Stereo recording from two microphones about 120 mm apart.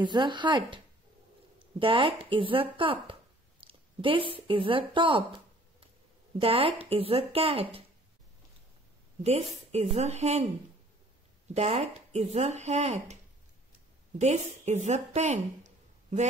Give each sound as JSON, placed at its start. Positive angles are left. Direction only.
{"t": 0.0, "sound": "speech", "side_deg": -40}
{"t": 1.8, "sound": "speech", "side_deg": -45}
{"t": 6.4, "sound": "speech", "side_deg": -50}
{"t": 9.2, "sound": "speech", "side_deg": -65}
{"t": 11.5, "sound": "speech", "side_deg": -60}
{"t": 14.2, "sound": "speech", "side_deg": -70}